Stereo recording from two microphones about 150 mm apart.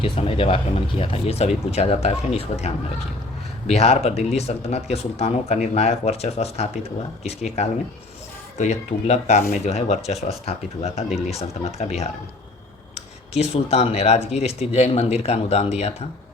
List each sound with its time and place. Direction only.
0.0 s speech: 40° left (ahead or behind)